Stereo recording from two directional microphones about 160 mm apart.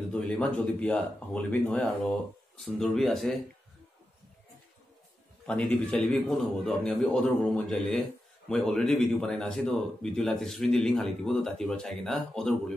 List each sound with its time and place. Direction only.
0.1 s speech: 10° left (ahead or behind)
5.5 s speech: 5° left (ahead or behind)